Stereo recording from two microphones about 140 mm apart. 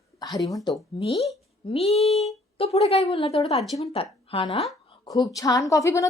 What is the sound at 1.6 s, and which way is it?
A woman's voice, 45° left (ahead or behind).